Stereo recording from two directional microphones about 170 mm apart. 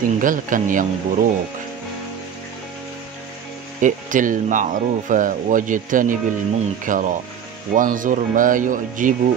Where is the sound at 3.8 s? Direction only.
50° right (ahead or behind).